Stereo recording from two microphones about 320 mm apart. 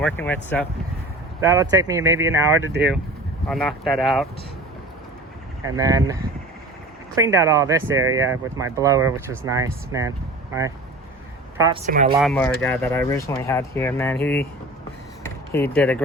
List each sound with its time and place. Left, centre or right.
0.0 s speech: centre
1.4 s speech: centre
5.6 s speech: centre
7.2 s speech: centre
11.8 s speech: right
12.2 s speech: centre